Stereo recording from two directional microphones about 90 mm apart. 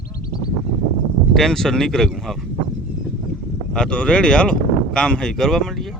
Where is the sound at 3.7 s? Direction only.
10° left (ahead or behind).